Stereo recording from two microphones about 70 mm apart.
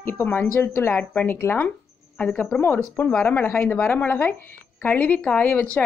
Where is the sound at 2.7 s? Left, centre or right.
Left.